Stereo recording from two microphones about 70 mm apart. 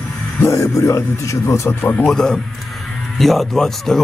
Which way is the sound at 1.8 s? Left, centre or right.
Left.